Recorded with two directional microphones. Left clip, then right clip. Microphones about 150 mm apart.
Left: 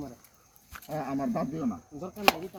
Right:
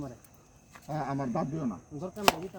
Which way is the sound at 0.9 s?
30° right (ahead or behind).